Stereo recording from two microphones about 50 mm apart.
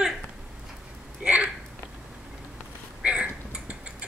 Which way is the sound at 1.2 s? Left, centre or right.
Right.